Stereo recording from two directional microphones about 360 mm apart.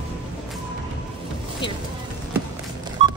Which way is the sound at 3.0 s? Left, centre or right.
Centre.